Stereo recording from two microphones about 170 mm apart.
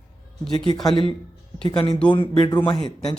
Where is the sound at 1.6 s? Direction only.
30° left (ahead or behind).